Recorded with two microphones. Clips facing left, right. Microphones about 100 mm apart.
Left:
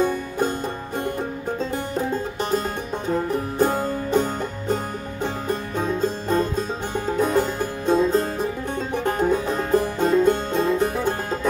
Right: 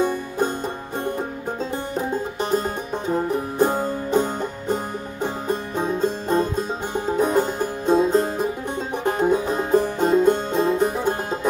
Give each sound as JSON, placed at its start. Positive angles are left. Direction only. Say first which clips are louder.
{"t": 2.5, "sound": "music", "louder": "right 2 dB", "side_deg": -20}